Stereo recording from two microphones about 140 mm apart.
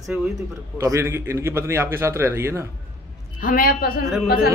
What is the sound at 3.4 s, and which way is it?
Speech, 90° left.